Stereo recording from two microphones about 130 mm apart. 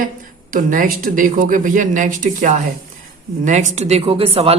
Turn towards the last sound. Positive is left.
turn(degrees=-50)  # may be behind; listen again after turning